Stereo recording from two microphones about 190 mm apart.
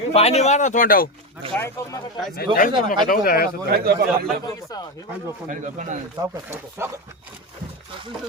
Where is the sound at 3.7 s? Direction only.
55° right (ahead or behind).